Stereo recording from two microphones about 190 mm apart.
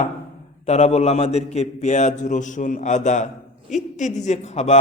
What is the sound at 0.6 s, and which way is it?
A man's voice, 35° left (ahead or behind).